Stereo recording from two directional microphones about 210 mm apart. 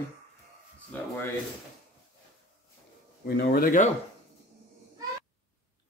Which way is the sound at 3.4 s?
45° left (ahead or behind).